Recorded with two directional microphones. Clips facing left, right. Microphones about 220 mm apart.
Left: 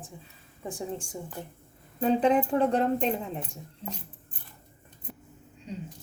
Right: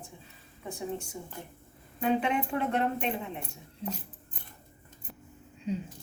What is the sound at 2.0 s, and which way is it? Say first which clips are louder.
Speech: left 5 dB; 35° left (ahead or behind).